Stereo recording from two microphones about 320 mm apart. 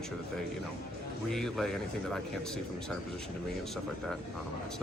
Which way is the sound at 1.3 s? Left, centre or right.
Centre.